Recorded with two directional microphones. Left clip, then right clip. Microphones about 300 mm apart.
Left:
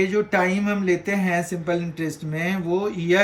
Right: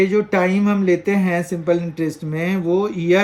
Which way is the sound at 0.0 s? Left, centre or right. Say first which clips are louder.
Right 4 dB; centre.